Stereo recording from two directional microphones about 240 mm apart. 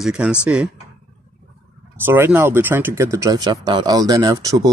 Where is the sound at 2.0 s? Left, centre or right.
Centre.